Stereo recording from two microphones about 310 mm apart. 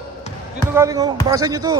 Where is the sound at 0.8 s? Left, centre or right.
Centre.